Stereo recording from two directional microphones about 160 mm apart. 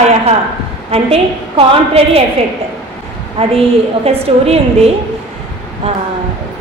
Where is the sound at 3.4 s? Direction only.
35° right (ahead or behind).